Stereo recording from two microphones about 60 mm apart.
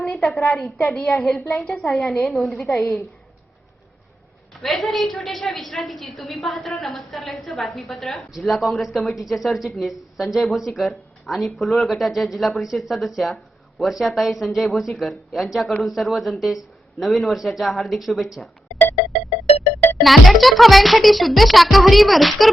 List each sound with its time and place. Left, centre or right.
0.0 s a woman's voice: centre
2.7 s a woman's voice: left
4.6 s a woman's voice: centre
20.0 s a woman's voice: centre